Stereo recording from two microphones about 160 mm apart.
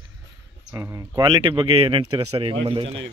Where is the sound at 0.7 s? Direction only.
20° right (ahead or behind); by 3.0 s 35° right (ahead or behind).